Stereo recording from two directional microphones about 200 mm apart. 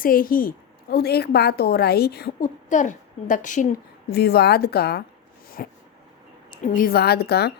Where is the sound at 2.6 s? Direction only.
40° left (ahead or behind).